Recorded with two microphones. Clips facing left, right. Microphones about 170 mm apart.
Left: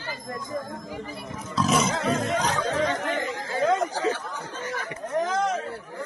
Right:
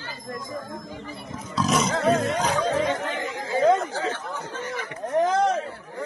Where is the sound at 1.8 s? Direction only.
Centre (ahead or behind).